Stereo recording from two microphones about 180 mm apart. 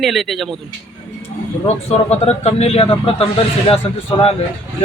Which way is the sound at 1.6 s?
35° left (ahead or behind).